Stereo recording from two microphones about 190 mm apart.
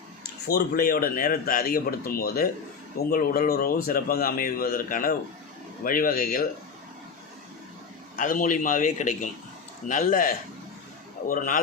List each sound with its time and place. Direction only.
0.4 s speech: 55° left (ahead or behind)
8.1 s speech: 45° left (ahead or behind)